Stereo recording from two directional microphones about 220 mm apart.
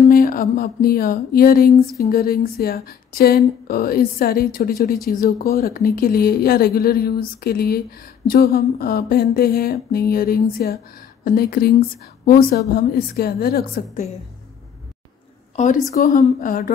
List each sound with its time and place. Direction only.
0.0 s a sound: 40° left (ahead or behind)
2.0 s a woman's voice: 45° left (ahead or behind)
15.5 s a woman's voice: 35° left (ahead or behind)